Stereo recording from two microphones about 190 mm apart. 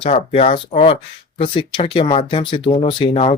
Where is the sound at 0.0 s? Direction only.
30° left (ahead or behind).